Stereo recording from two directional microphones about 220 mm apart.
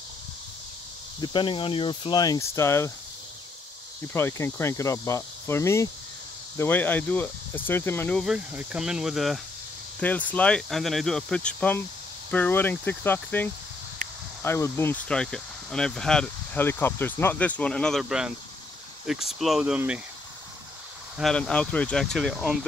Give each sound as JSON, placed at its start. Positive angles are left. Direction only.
{"t": 1.2, "sound": "speech", "side_deg": 20}
{"t": 4.1, "sound": "speech", "side_deg": 10}
{"t": 21.2, "sound": "speech", "side_deg": 5}